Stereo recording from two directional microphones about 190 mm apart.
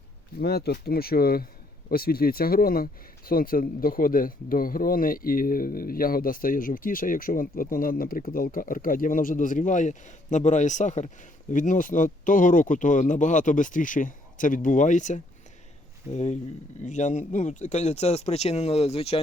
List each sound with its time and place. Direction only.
0.3 s speech: 55° left (ahead or behind); by 19.2 s 30° left (ahead or behind)